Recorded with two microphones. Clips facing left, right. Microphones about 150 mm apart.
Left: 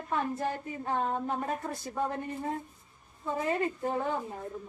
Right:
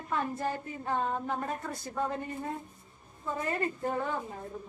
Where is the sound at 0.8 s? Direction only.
20° left (ahead or behind).